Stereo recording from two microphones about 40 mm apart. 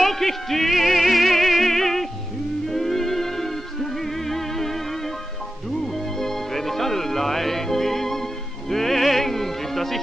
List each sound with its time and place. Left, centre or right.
0.0 s music: centre
5.9 s music: centre